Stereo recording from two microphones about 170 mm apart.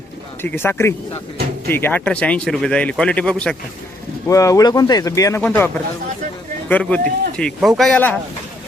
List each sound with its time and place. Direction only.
0.4 s speech: 15° left (ahead or behind)
4.3 s speech: 20° left (ahead or behind)
5.4 s speech: 10° left (ahead or behind)